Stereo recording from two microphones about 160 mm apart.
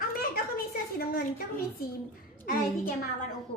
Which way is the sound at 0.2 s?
65° left (ahead or behind).